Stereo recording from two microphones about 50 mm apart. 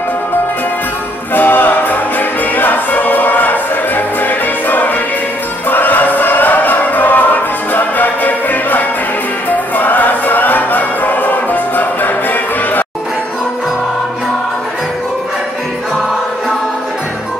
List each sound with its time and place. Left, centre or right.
1.3 s music: left